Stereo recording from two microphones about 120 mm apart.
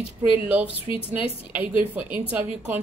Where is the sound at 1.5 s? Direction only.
15° right (ahead or behind).